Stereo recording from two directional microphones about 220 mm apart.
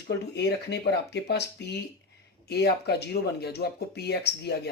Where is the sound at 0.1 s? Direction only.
50° left (ahead or behind).